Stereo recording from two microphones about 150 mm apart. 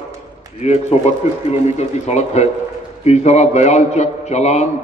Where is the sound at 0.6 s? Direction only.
45° left (ahead or behind).